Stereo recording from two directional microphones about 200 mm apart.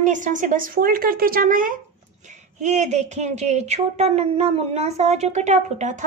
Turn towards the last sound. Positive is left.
turn(degrees=-35)  # may be behind; listen again after turning